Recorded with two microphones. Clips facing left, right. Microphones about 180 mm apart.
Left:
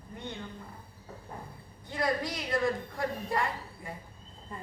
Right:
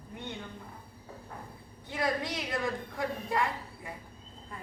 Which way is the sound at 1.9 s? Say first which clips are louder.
Left 1 dB; centre (ahead or behind).